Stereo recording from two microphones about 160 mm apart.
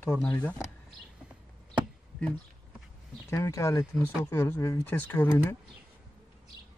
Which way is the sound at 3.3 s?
20° left (ahead or behind).